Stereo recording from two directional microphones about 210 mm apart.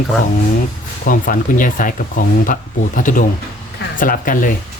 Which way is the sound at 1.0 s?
40° left (ahead or behind).